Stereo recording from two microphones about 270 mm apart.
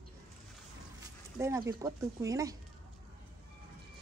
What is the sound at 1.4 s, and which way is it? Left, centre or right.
A woman's voice, centre.